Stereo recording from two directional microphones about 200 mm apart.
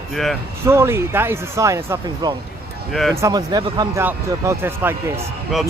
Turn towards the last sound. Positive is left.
turn(degrees=0)  # may be behind; listen again after turning